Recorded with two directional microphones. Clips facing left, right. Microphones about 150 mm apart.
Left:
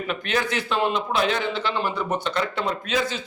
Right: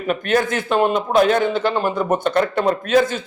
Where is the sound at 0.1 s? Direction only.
50° right (ahead or behind).